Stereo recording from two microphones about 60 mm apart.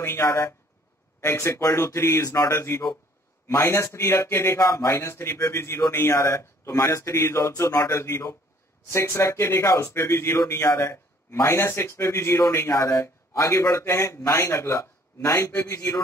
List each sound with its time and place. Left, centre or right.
0.0 s a man's voice: left
7.2 s a man's voice: left
12.5 s a man's voice: left